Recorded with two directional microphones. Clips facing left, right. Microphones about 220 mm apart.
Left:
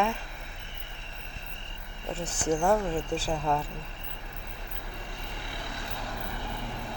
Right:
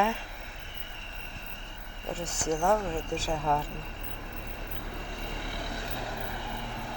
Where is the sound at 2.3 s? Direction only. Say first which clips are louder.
Left 3 dB; 30° left (ahead or behind).